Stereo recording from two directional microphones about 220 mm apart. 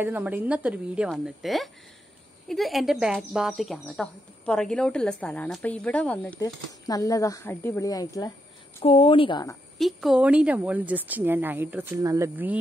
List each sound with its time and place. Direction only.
0.0 s speech: 10° right (ahead or behind); by 9.6 s 20° left (ahead or behind)
9.8 s speech: centre (ahead or behind)